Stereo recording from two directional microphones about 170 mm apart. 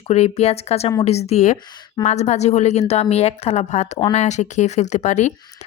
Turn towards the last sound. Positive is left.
turn(degrees=45)  # may be behind; listen again after turning